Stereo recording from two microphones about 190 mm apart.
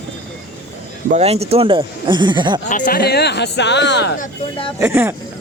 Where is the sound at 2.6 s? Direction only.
45° left (ahead or behind); by 4.2 s 65° left (ahead or behind).